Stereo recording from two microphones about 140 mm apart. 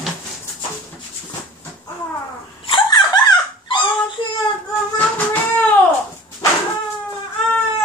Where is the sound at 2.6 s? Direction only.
35° left (ahead or behind).